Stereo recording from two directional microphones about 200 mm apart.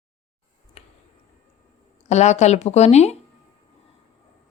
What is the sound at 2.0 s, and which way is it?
Speech, 35° left (ahead or behind).